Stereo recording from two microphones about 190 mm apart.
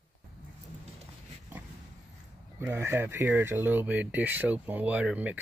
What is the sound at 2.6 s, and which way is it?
Speech, 10° right (ahead or behind).